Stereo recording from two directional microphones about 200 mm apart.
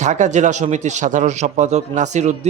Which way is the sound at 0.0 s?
35° right (ahead or behind).